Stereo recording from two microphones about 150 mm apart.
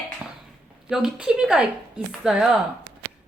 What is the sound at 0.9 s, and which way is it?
Speech, 5° right (ahead or behind).